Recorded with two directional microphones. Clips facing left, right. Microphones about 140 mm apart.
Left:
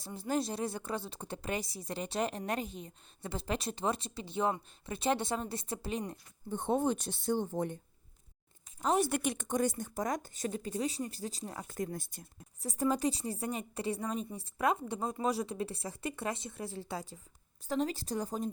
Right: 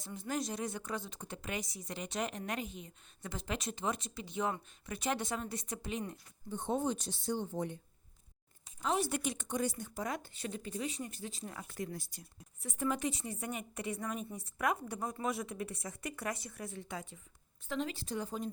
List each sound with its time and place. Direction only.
0.0 s a woman's voice: 35° left (ahead or behind)
6.5 s speech: 55° left (ahead or behind)
8.8 s speech: 45° left (ahead or behind)
12.5 s a woman's voice: 35° left (ahead or behind)